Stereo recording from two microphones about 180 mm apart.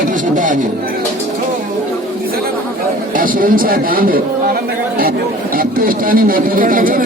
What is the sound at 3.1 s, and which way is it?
Speech, 50° right (ahead or behind).